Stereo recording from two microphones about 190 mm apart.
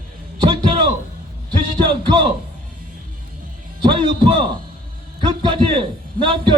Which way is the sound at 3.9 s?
25° right (ahead or behind).